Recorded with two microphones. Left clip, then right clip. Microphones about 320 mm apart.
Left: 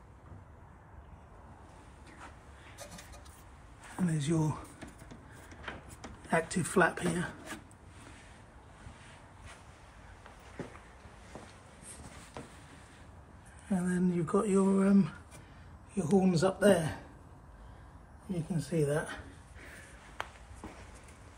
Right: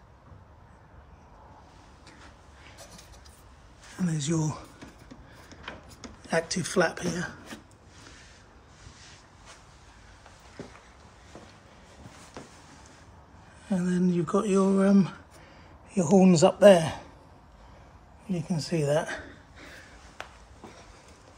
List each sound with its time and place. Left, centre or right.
4.1 s speech: centre
6.2 s speech: centre
13.7 s speech: centre
16.0 s speech: right
18.6 s speech: right